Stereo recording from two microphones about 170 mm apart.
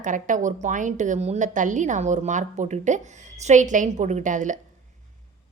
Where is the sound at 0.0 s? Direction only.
50° right (ahead or behind).